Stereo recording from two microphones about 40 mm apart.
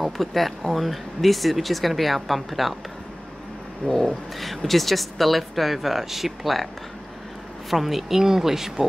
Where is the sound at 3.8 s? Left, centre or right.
Centre.